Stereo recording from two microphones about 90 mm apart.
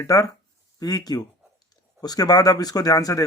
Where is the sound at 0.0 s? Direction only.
35° left (ahead or behind).